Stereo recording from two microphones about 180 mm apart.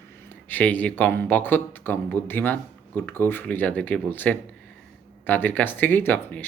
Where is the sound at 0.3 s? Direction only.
10° left (ahead or behind).